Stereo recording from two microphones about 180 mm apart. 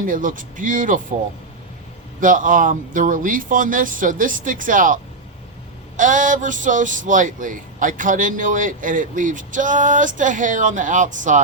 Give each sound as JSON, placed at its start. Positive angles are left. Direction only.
{"t": 0.0, "sound": "speech", "side_deg": -50}
{"t": 2.2, "sound": "speech", "side_deg": -45}
{"t": 6.0, "sound": "speech", "side_deg": -45}